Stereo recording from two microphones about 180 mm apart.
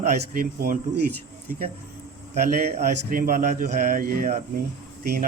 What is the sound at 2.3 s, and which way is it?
A man's voice, 40° right (ahead or behind).